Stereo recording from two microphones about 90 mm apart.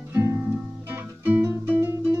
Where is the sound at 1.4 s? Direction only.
30° right (ahead or behind).